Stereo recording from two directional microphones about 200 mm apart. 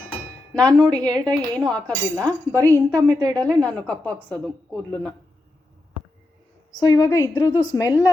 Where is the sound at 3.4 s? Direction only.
5° left (ahead or behind).